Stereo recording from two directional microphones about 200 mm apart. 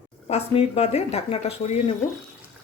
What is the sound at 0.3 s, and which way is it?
Speech, 30° left (ahead or behind).